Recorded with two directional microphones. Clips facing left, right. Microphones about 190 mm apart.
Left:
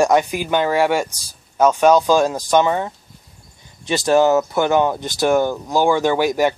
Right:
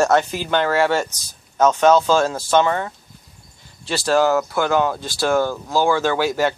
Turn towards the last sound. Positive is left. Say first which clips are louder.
# left 2 dB
turn(degrees=15)  # may be behind; listen again after turning